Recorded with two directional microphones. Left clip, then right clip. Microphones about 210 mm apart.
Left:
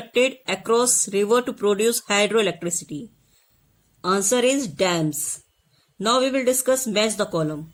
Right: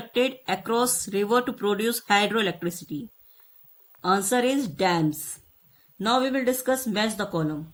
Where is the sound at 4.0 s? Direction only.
30° left (ahead or behind).